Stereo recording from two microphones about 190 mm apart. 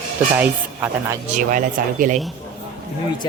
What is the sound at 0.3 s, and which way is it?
Speech, 10° right (ahead or behind).